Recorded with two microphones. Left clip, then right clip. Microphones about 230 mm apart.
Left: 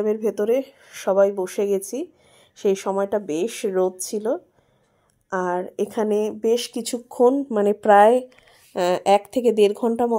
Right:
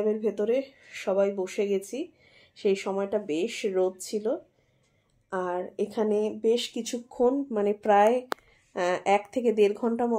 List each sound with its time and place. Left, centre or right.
0.0 s speech: left